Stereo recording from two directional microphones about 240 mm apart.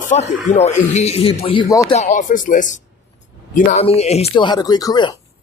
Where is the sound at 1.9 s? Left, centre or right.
Left; by 5.2 s centre.